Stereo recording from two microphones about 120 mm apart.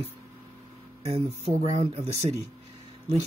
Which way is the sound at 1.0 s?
60° right (ahead or behind).